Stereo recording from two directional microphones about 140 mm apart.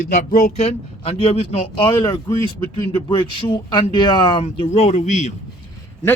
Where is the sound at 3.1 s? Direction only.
35° left (ahead or behind); by 5.3 s 60° left (ahead or behind).